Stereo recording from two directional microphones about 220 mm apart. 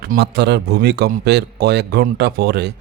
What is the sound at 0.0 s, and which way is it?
Speech, 45° right (ahead or behind).